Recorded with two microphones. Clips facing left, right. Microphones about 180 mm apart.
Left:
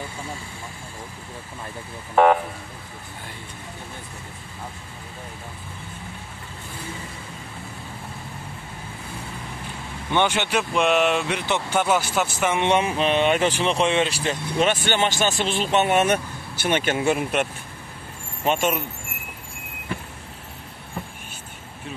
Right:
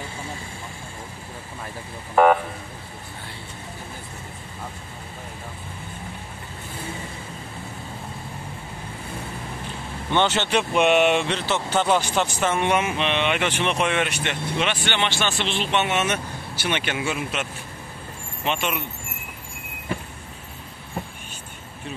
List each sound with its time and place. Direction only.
10.1 s speech: 10° left (ahead or behind)
10.6 s speech: centre (ahead or behind)
11.2 s speech: 15° left (ahead or behind)
12.6 s speech: 30° left (ahead or behind); by 17.5 s 55° left (ahead or behind)
18.4 s speech: 45° left (ahead or behind)